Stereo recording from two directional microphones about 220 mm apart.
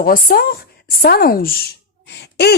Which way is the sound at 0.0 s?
40° left (ahead or behind).